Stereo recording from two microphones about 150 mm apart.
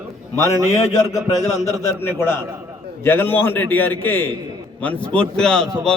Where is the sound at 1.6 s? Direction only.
15° left (ahead or behind).